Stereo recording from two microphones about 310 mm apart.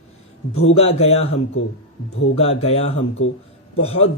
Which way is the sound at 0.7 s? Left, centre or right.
Centre.